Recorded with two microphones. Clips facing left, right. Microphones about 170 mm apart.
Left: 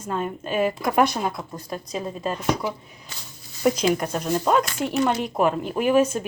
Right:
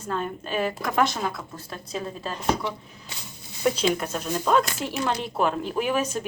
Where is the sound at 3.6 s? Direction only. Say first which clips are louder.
Left 3 dB; 10° left (ahead or behind).